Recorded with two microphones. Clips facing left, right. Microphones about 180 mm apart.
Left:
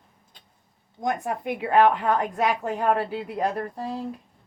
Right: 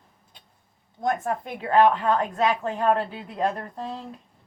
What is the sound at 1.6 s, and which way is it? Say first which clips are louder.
Speech: even; 15° left (ahead or behind).